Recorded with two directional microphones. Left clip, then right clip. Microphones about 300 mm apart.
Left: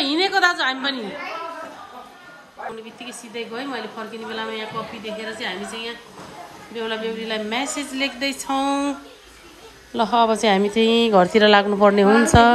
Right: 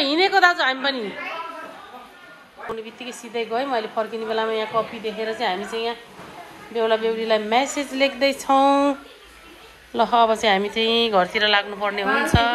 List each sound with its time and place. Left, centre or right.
0.0 s a sound: centre
0.4 s a woman's voice: centre
3.0 s a woman's voice: centre
9.9 s speech: centre